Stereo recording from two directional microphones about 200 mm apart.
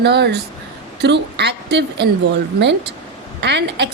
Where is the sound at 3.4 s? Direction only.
60° right (ahead or behind).